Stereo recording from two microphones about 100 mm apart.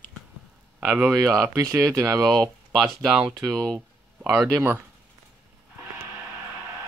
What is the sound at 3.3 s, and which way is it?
Speech, 35° right (ahead or behind).